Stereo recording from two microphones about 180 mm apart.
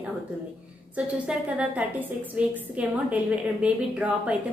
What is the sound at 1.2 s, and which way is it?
A woman's voice, 5° right (ahead or behind).